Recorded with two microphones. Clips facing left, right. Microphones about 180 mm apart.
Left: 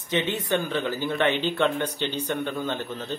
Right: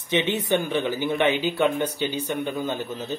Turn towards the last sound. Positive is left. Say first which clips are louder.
# right 2 dB
turn(degrees=-10)  # may be behind; listen again after turning